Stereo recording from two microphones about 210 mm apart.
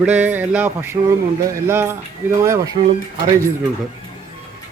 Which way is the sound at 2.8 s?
30° right (ahead or behind).